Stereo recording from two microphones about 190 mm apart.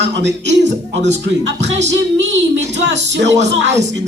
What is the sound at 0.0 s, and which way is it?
Speech, 65° right (ahead or behind).